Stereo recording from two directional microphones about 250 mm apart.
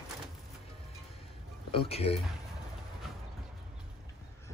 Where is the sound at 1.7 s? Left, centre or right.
Left.